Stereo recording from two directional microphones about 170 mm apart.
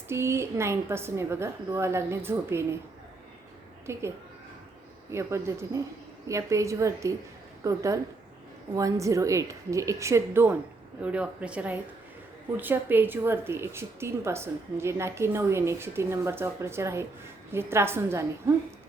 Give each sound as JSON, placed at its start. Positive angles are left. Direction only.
{"t": 0.1, "sound": "a woman's voice", "side_deg": -15}
{"t": 3.9, "sound": "a woman's voice", "side_deg": -15}
{"t": 5.1, "sound": "a woman's voice", "side_deg": -15}